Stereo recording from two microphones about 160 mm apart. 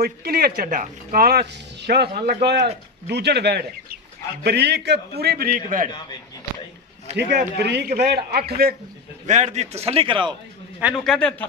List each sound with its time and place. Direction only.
0.0 s speech: 75° right (ahead or behind)
0.6 s speech: 60° right (ahead or behind)
7.2 s speech: 90° right; by 8.7 s 70° right (ahead or behind)
9.2 s a man's voice: 45° right (ahead or behind); by 10.3 s 30° right (ahead or behind)
11.1 s a man's voice: 5° left (ahead or behind)